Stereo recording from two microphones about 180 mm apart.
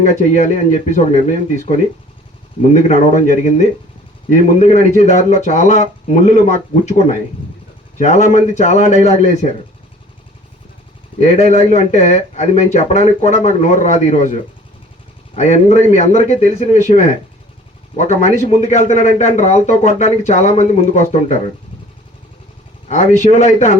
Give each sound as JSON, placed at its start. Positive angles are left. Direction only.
{"t": 0.0, "sound": "speech", "side_deg": 40}
{"t": 11.5, "sound": "speech", "side_deg": 40}
{"t": 15.4, "sound": "speech", "side_deg": 40}
{"t": 22.9, "sound": "speech", "side_deg": 40}